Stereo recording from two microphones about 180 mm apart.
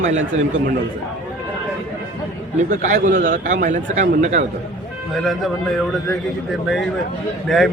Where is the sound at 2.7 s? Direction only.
45° right (ahead or behind).